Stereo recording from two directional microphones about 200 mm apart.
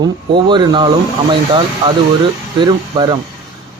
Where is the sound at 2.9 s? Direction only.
20° right (ahead or behind).